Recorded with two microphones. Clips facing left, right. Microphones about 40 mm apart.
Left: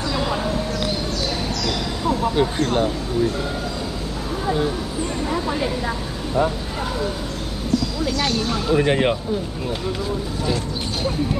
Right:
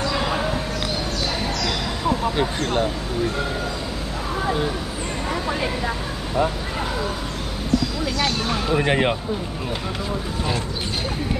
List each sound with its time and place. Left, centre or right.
8.5 s speech: centre